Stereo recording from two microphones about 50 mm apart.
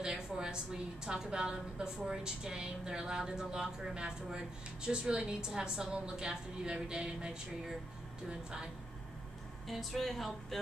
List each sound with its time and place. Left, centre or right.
0.0 s a woman's voice: centre
9.7 s speech: centre